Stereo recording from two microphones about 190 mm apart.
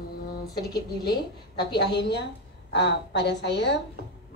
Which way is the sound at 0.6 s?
60° left (ahead or behind).